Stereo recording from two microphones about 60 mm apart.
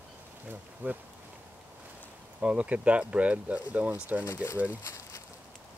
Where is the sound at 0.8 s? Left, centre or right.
Right.